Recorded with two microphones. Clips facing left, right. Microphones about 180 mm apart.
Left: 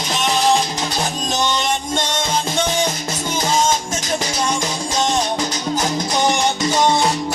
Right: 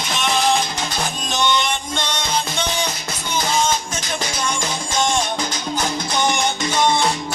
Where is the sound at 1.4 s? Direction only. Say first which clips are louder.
Right 1 dB; 40° left (ahead or behind).